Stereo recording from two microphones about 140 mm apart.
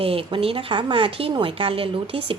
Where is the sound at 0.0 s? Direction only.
40° right (ahead or behind).